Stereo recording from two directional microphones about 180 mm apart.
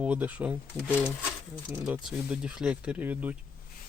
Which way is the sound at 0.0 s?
10° right (ahead or behind).